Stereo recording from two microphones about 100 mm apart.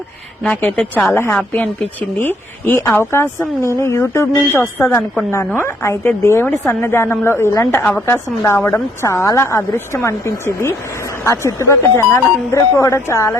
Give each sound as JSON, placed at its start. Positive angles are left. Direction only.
{"t": 1.1, "sound": "a woman's voice", "side_deg": 20}